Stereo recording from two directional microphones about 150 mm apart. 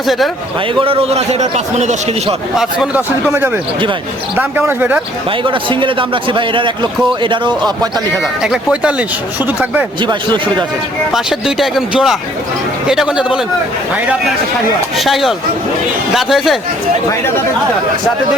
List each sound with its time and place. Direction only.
0.8 s a man's voice: 40° right (ahead or behind)
2.6 s speech: 5° right (ahead or behind)
5.4 s a man's voice: 35° right (ahead or behind)
8.2 s speech: 5° right (ahead or behind)
10.0 s a man's voice: 30° right (ahead or behind)
11.1 s speech: centre (ahead or behind)
17.1 s speech: 15° left (ahead or behind)